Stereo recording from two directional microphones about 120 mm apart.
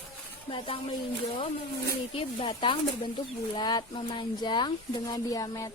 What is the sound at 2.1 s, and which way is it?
Speech, 45° left (ahead or behind).